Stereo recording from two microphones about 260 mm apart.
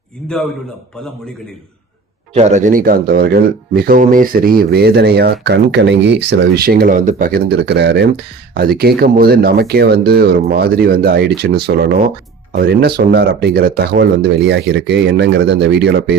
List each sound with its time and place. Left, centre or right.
2.3 s speech: right